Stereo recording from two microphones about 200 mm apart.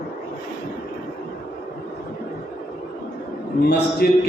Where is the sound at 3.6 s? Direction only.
50° left (ahead or behind).